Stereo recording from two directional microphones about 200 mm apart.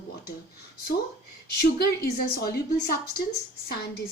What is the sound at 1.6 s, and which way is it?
Speech, 50° left (ahead or behind).